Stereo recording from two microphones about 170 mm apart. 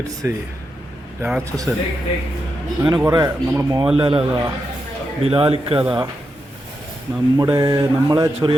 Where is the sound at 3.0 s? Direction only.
20° right (ahead or behind).